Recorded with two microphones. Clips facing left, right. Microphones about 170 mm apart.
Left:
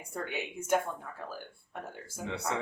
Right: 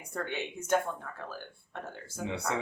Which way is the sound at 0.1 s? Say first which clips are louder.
Right 1 dB; 10° left (ahead or behind).